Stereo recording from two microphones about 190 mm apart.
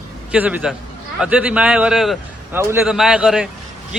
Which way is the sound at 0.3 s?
5° right (ahead or behind).